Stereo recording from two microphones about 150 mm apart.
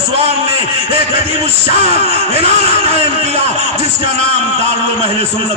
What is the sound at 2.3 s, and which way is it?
A man's voice, 40° right (ahead or behind).